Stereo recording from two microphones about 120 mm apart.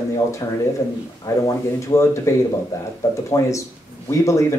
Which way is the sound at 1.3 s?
25° left (ahead or behind).